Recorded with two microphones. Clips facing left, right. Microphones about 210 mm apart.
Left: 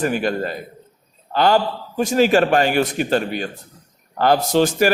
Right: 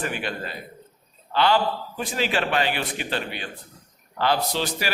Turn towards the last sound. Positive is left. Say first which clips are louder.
# left 11 dB
turn(degrees=50)  # may be behind; listen again after turning